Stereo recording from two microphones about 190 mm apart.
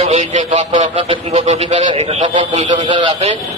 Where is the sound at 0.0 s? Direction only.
35° right (ahead or behind).